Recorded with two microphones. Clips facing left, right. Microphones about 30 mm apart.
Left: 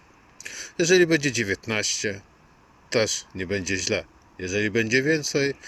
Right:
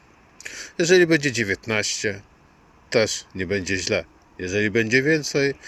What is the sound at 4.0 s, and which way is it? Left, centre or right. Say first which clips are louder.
Speech: right 3 dB; centre.